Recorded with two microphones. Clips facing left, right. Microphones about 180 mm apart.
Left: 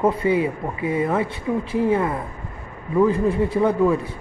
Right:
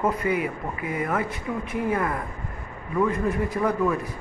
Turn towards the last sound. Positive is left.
turn(degrees=30)  # may be behind; listen again after turning